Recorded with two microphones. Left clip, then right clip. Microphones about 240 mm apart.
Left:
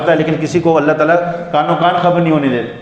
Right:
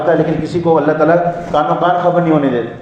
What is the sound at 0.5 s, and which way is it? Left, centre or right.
A man's voice, left.